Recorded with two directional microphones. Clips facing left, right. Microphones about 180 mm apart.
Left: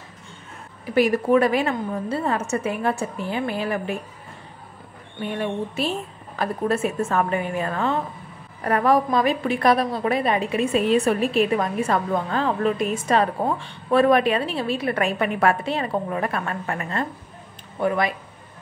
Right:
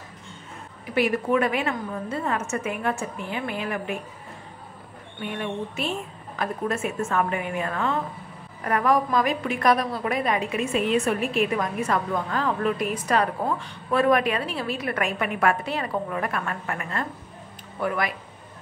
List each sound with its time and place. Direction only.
0.9 s a woman's voice: 40° left (ahead or behind)
5.4 s a woman's voice: 35° left (ahead or behind)